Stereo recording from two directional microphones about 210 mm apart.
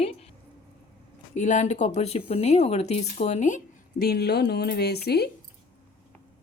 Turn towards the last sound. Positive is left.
turn(degrees=50)  # may be behind; listen again after turning